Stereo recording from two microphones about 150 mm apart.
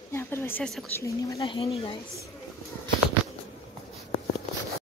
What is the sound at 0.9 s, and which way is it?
Speech, 20° left (ahead or behind).